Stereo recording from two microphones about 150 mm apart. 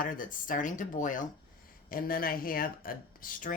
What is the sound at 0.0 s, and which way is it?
Speech, 65° left (ahead or behind).